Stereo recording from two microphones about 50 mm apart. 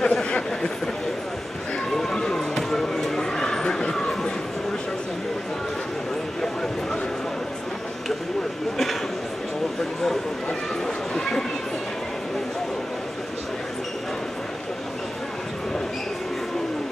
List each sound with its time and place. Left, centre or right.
0.0 s a sound: centre
2.0 s basketball bounce: centre
11.1 s chatter: centre